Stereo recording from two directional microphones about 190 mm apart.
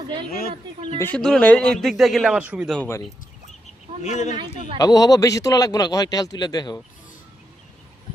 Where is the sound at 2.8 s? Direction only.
15° left (ahead or behind).